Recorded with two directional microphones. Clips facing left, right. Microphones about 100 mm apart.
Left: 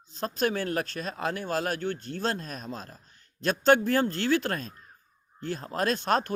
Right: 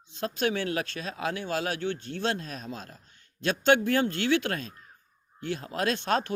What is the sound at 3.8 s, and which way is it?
Speech, 60° right (ahead or behind).